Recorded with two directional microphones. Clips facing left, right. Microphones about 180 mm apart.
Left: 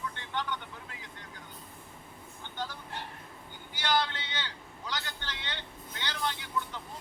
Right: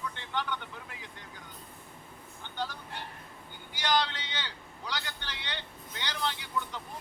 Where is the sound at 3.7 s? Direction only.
15° right (ahead or behind).